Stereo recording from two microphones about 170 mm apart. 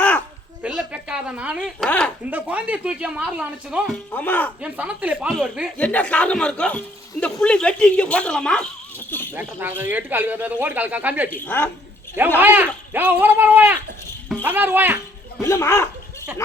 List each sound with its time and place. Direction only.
0.6 s a woman's voice: 5° right (ahead or behind)
1.9 s speech: 5° left (ahead or behind)
2.3 s speech: 10° right (ahead or behind)
4.1 s speech: 10° left (ahead or behind)
4.6 s speech: 5° right (ahead or behind)
5.7 s speech: 10° left (ahead or behind)
9.0 s a sound: 10° left (ahead or behind)
9.3 s speech: 10° right (ahead or behind)
11.3 s speech: 10° left (ahead or behind)
12.4 s speech: 10° right (ahead or behind)
15.4 s speech: 15° left (ahead or behind)